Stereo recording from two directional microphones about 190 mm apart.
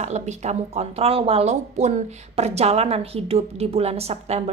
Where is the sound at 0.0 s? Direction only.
35° right (ahead or behind).